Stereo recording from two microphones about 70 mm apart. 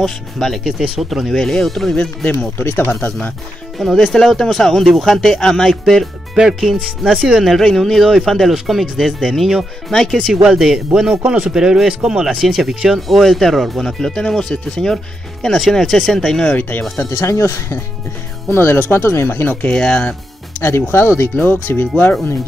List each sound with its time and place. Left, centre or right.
0.0 s speech: centre
2.0 s speech: left
3.7 s speech: centre
16.4 s speech: left
17.0 s speech: left
19.8 s speech: centre
20.6 s speech: left